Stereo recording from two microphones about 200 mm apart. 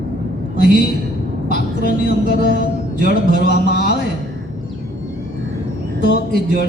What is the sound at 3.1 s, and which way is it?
Speech, 55° left (ahead or behind).